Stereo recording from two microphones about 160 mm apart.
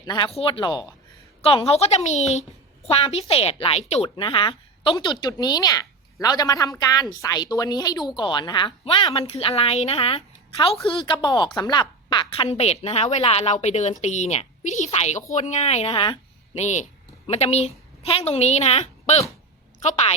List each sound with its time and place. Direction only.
0.0 s a woman's voice: 25° left (ahead or behind)
16.6 s a woman's voice: 50° left (ahead or behind)